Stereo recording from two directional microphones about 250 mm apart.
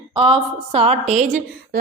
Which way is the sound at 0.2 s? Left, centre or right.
Right.